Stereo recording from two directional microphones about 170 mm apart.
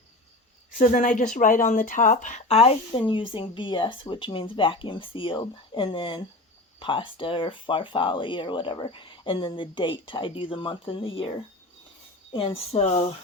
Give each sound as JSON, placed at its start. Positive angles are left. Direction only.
{"t": 0.8, "sound": "speech", "side_deg": 50}
{"t": 12.4, "sound": "speech", "side_deg": 35}